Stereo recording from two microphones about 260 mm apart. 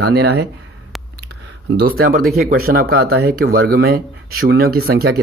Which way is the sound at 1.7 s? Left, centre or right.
Right.